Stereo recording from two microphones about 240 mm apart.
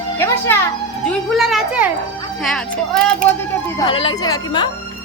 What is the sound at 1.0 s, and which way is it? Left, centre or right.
A woman's voice, centre.